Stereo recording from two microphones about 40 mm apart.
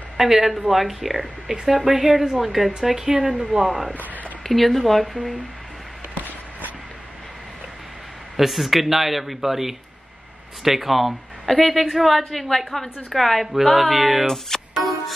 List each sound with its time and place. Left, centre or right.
0.2 s a woman's voice: centre
2.4 s a woman's voice: centre
3.1 s speech: right
3.6 s a woman's voice: centre
4.4 s a woman's voice: centre
8.4 s a woman's voice: centre
14.2 s speech: centre
14.8 s music: centre